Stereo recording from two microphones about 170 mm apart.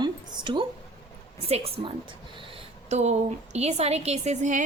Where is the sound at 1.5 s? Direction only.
40° right (ahead or behind).